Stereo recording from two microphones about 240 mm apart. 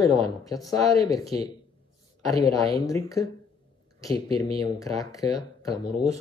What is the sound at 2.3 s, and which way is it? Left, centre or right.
Speech, centre.